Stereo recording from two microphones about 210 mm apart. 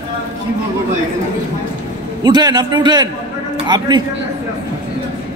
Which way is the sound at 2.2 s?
20° right (ahead or behind).